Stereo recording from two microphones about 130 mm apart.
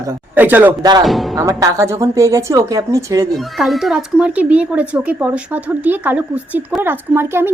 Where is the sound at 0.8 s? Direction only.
30° right (ahead or behind).